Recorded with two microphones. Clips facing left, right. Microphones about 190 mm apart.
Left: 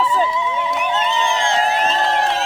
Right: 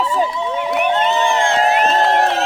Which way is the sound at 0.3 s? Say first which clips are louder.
Right 1 dB; 50° right (ahead or behind).